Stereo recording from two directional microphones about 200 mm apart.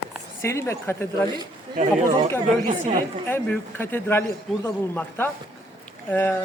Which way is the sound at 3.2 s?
10° left (ahead or behind).